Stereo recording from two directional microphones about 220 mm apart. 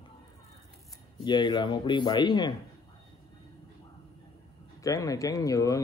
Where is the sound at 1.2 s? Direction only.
20° left (ahead or behind).